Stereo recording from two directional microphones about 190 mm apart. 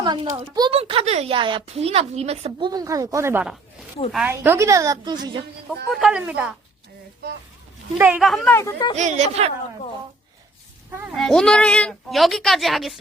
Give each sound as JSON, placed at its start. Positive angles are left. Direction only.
{"t": 0.0, "sound": "a sound", "side_deg": -20}
{"t": 0.5, "sound": "a woman's voice", "side_deg": -25}
{"t": 5.9, "sound": "a woman's voice", "side_deg": 0}
{"t": 7.9, "sound": "a woman's voice", "side_deg": -10}
{"t": 8.5, "sound": "speech", "side_deg": 15}
{"t": 9.0, "sound": "a woman's voice", "side_deg": -40}
{"t": 11.2, "sound": "a woman's voice", "side_deg": 5}